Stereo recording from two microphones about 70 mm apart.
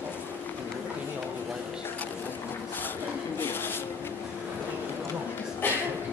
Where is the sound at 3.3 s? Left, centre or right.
Left.